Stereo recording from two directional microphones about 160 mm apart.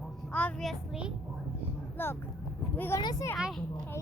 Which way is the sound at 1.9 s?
15° left (ahead or behind).